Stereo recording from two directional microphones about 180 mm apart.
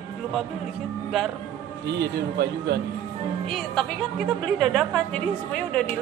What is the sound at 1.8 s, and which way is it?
Speech, 70° right (ahead or behind).